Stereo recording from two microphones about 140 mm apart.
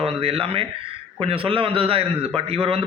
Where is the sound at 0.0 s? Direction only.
40° right (ahead or behind).